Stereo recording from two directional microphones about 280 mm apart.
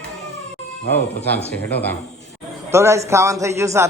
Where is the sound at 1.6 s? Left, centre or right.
Centre.